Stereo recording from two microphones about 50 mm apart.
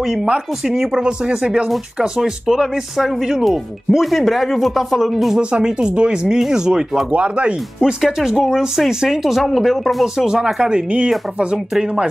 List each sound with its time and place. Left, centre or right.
0.0 s speech: centre
5.4 s speech: centre
7.1 s speech: right
7.8 s speech: centre
8.3 s speech: centre
10.2 s speech: centre